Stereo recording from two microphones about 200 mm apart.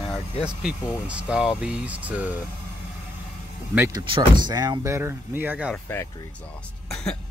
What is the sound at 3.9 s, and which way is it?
Speech, 20° right (ahead or behind).